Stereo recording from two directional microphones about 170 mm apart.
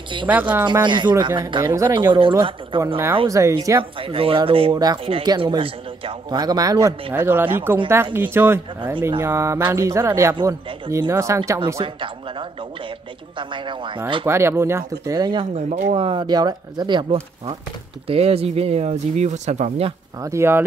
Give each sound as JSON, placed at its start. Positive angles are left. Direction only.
{"t": 0.3, "sound": "speech", "side_deg": -10}
{"t": 0.8, "sound": "speech", "side_deg": -25}
{"t": 2.7, "sound": "speech", "side_deg": -30}
{"t": 3.3, "sound": "speech", "side_deg": -20}
{"t": 4.0, "sound": "speech", "side_deg": -35}
{"t": 11.8, "sound": "speech", "side_deg": -30}
{"t": 14.2, "sound": "speech", "side_deg": -15}
{"t": 15.5, "sound": "speech", "side_deg": -40}
{"t": 20.2, "sound": "speech", "side_deg": -15}